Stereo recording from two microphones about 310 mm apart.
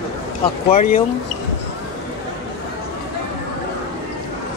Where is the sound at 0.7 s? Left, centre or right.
Left.